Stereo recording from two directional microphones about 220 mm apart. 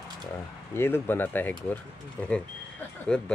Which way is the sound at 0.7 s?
10° left (ahead or behind).